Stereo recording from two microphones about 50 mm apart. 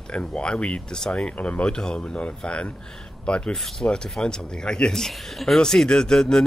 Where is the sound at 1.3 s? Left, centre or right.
Left.